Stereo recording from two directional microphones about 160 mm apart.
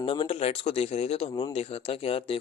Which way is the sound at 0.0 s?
35° left (ahead or behind).